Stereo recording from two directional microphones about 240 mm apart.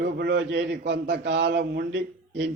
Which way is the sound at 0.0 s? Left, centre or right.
Right.